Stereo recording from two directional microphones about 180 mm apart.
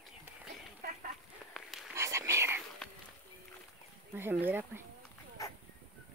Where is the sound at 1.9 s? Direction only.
15° right (ahead or behind).